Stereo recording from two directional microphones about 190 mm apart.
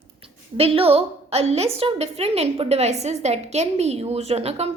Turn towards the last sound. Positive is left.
turn(degrees=-30)  # may be behind; listen again after turning